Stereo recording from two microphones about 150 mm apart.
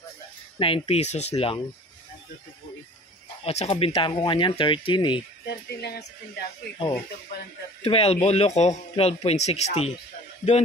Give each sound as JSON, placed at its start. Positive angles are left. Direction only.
{"t": 0.6, "sound": "speech", "side_deg": 35}
{"t": 3.4, "sound": "speech", "side_deg": 45}
{"t": 5.5, "sound": "speech", "side_deg": 90}
{"t": 7.8, "sound": "speech", "side_deg": 40}